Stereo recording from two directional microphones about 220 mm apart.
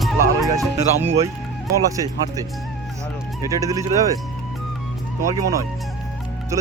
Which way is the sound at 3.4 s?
15° right (ahead or behind).